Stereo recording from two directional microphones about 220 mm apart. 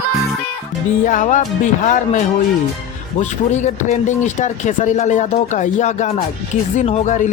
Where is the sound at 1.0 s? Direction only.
35° left (ahead or behind).